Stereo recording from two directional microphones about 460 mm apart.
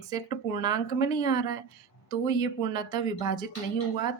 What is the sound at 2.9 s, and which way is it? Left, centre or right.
Speech, centre.